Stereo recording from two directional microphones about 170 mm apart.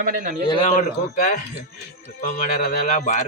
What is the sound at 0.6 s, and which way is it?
A man's voice, 50° left (ahead or behind).